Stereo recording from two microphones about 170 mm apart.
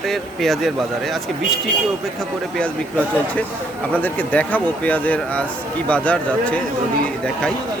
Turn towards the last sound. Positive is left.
turn(degrees=5)  # may be behind; listen again after turning